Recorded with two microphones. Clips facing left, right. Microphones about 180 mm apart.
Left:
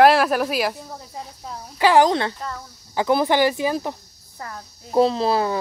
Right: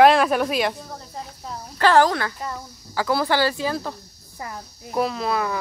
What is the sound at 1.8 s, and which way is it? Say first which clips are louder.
Speech: left 1 dB; 15° left (ahead or behind).